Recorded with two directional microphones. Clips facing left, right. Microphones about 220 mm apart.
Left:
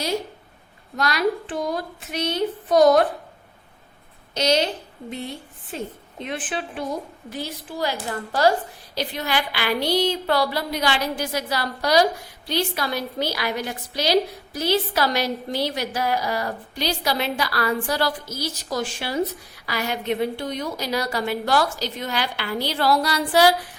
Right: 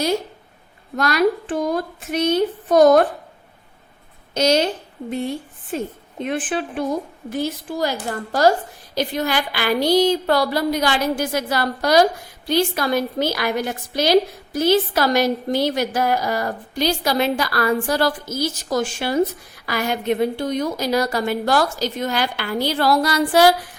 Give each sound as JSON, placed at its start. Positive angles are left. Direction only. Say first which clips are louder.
{"t": 0.9, "sound": "a woman's voice", "louder": "right 4 dB", "side_deg": -50}
{"t": 4.4, "sound": "a woman's voice", "louder": "right 4 dB", "side_deg": -50}
{"t": 6.2, "sound": "a woman's voice", "louder": "right 6 dB", "side_deg": -50}